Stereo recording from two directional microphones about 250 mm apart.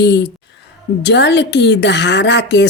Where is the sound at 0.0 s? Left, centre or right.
Left.